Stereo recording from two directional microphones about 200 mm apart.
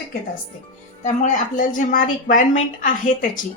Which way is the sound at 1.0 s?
40° left (ahead or behind).